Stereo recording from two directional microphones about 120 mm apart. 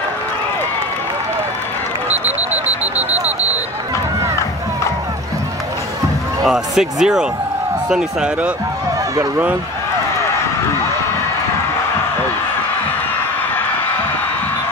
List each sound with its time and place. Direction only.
2.5 s alarm: 65° right (ahead or behind)
3.0 s vehicle: 15° right (ahead or behind)
6.4 s speech: centre (ahead or behind)